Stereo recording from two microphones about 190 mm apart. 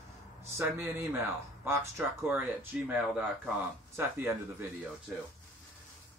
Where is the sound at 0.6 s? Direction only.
15° right (ahead or behind).